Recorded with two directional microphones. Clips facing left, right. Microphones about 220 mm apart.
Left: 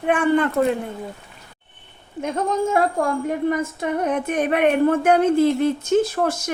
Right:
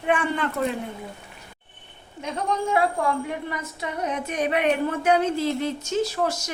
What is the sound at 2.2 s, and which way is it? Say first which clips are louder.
A woman's voice: left 5 dB; 45° left (ahead or behind).